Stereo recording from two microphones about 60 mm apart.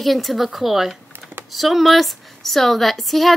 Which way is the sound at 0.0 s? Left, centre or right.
Centre.